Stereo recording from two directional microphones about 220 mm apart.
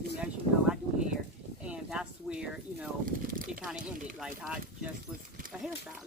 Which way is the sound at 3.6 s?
5° right (ahead or behind).